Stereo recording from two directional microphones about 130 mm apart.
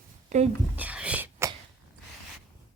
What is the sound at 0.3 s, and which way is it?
Speech, 60° right (ahead or behind).